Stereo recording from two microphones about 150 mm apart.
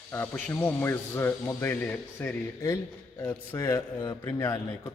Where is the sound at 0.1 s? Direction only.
10° left (ahead or behind).